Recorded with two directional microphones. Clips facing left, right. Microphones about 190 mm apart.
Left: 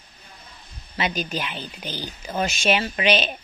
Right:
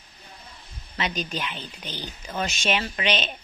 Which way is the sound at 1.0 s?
5° left (ahead or behind).